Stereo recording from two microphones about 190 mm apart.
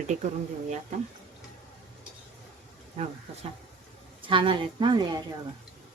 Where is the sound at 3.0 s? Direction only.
35° right (ahead or behind).